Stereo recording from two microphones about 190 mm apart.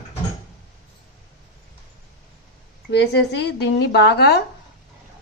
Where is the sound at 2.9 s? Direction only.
65° left (ahead or behind).